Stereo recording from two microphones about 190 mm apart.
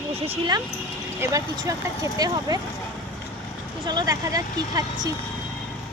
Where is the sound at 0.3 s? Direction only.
25° right (ahead or behind).